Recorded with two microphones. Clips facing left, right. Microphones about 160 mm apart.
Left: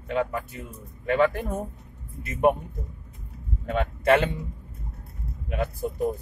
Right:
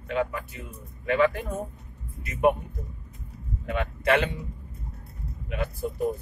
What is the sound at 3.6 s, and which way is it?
Speech, 40° left (ahead or behind).